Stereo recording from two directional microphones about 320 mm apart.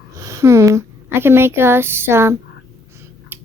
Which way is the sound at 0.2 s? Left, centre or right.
Centre.